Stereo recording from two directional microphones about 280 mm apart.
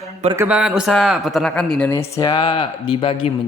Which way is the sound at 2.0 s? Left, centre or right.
Centre.